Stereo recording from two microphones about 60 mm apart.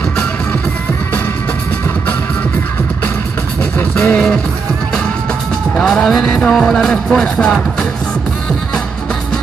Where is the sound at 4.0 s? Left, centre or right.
Centre.